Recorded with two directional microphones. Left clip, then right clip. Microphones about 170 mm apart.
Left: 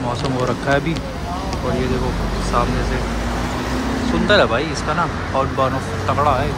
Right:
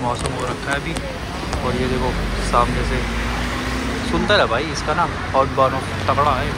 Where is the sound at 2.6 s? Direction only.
10° left (ahead or behind).